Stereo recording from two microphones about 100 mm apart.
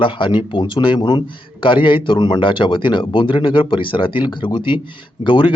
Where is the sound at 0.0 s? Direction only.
55° left (ahead or behind).